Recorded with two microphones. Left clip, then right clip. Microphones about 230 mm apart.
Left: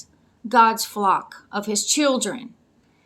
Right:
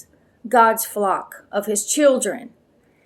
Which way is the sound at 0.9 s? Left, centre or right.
Left.